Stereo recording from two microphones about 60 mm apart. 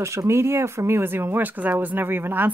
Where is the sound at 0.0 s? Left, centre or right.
Right.